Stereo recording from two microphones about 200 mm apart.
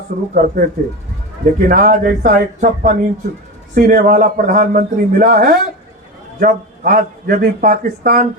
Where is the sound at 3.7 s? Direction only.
45° right (ahead or behind).